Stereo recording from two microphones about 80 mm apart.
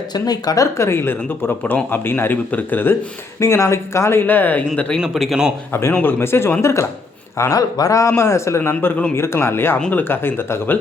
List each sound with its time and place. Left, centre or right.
0.1 s speech: left
3.4 s speech: left
4.9 s speech: centre
5.7 s speech: left
8.1 s speech: left
8.7 s a man's voice: centre
9.1 s speech: left